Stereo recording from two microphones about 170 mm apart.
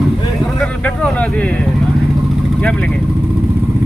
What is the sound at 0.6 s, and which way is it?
Vehicle, 10° left (ahead or behind).